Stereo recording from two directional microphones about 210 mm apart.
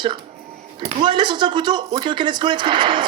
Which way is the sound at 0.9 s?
20° right (ahead or behind).